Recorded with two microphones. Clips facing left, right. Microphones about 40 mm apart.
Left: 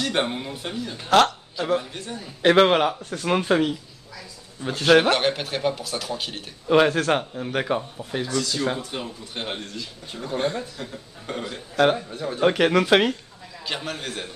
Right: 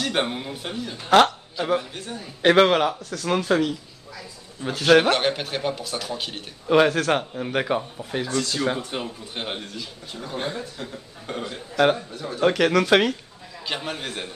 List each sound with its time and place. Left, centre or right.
0.0 s a man's voice: centre
2.6 s speech: centre
3.0 s speech: left
4.1 s a sound: centre
4.7 s a man's voice: centre
8.3 s speech: right
8.5 s a man's voice: centre
12.2 s speech: centre
13.7 s speech: centre